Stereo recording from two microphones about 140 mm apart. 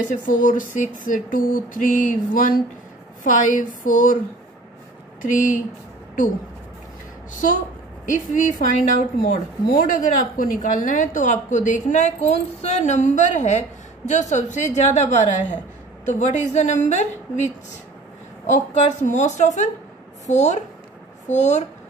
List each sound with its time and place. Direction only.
0.1 s speech: 70° left (ahead or behind)
5.2 s a woman's voice: 60° left (ahead or behind)
8.3 s a woman's voice: 75° left (ahead or behind); by 17.5 s 60° left (ahead or behind)
18.5 s a woman's voice: 55° left (ahead or behind)